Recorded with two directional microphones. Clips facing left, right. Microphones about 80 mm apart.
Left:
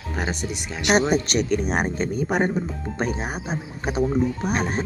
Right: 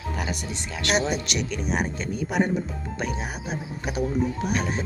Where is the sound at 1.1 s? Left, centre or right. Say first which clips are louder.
Left 7 dB; left.